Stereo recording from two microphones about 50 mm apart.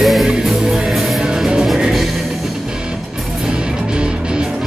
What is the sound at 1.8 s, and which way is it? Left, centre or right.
Music, centre.